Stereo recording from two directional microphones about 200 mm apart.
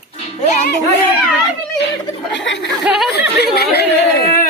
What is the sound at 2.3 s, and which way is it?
Speech, 60° left (ahead or behind).